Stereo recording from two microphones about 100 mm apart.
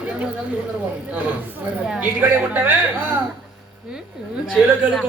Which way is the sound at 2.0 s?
20° right (ahead or behind).